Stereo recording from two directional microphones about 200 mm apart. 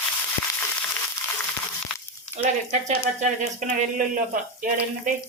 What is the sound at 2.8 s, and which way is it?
Speech, 35° right (ahead or behind).